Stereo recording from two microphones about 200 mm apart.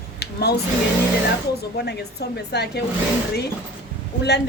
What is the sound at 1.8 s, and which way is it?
A woman's voice, 55° left (ahead or behind).